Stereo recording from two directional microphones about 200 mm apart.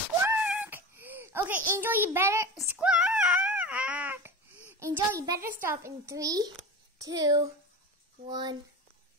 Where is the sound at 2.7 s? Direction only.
5° right (ahead or behind).